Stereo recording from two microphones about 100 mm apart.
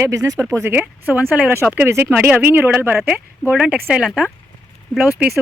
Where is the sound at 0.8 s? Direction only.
20° right (ahead or behind).